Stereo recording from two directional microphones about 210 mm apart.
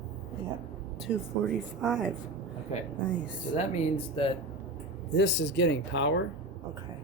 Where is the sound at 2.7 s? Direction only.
30° left (ahead or behind).